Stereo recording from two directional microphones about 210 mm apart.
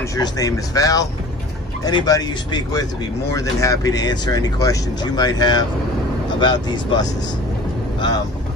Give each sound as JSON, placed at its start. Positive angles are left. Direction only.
{"t": 0.1, "sound": "speech", "side_deg": 15}